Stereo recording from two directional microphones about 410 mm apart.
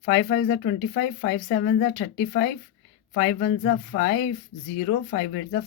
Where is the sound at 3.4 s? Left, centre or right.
Left.